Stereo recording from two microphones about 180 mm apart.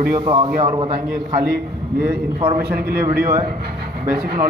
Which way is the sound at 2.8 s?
55° right (ahead or behind).